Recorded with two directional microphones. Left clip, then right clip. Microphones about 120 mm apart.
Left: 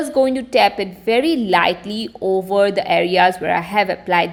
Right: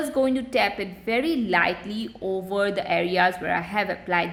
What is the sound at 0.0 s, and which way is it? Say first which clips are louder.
A woman's voice: left 7 dB; 25° left (ahead or behind).